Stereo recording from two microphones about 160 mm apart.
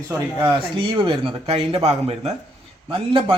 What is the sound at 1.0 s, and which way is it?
Speech, 30° right (ahead or behind).